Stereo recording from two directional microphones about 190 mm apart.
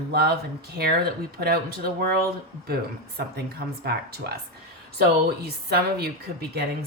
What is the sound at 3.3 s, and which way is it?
Speech, 55° right (ahead or behind).